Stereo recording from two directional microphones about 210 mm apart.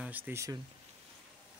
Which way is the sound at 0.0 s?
10° right (ahead or behind).